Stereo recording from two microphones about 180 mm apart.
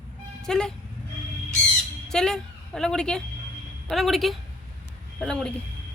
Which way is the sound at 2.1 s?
5° left (ahead or behind).